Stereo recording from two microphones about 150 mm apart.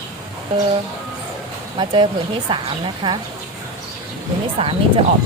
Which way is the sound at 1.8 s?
35° right (ahead or behind).